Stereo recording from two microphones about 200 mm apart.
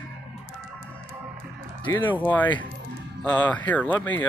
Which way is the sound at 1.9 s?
10° left (ahead or behind).